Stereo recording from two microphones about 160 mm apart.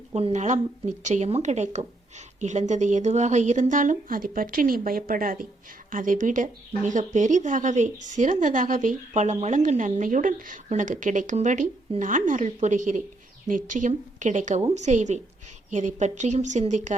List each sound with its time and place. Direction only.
0.1 s speech: 40° right (ahead or behind)